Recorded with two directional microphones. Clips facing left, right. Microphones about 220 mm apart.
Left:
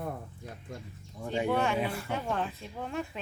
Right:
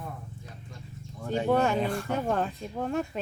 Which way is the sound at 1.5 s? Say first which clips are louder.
Right 6 dB; 40° right (ahead or behind).